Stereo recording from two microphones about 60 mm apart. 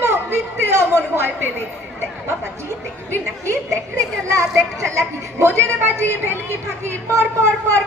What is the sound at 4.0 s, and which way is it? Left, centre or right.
Speech, right.